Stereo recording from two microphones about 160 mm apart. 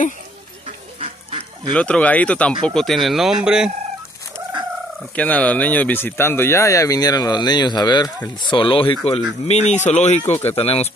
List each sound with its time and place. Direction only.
0.7 s a sound: 40° right (ahead or behind)
1.7 s speech: 5° left (ahead or behind)
5.1 s speech: 10° left (ahead or behind); by 10.2 s 45° left (ahead or behind)
10.2 s speech: 15° left (ahead or behind)
10.5 s speech: 40° left (ahead or behind)